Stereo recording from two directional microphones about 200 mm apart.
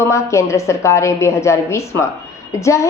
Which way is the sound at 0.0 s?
15° left (ahead or behind).